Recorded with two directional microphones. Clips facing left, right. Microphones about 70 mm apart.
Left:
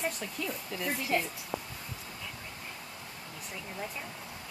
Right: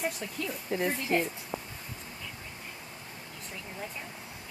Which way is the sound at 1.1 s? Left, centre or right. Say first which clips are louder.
Right 2 dB; right.